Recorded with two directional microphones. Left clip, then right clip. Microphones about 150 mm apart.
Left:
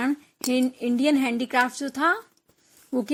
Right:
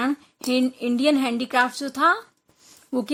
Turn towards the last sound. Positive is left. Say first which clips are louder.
# right 1 dB
turn(degrees=10)  # may be behind; listen again after turning